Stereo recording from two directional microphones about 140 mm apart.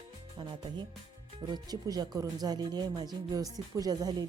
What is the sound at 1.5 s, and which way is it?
Speech, 30° right (ahead or behind).